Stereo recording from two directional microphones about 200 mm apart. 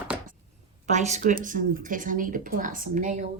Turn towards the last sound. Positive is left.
turn(degrees=-40)  # may be behind; listen again after turning